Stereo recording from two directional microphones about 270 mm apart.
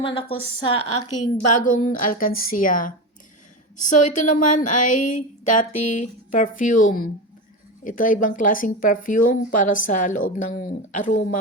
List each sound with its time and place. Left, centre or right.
0.0 s speech: centre
0.6 s a woman's voice: left
2.0 s a woman's voice: left